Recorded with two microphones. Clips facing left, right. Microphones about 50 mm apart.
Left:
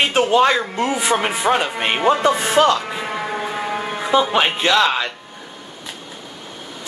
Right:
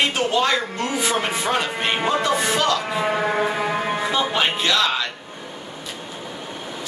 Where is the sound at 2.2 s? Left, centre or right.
Left.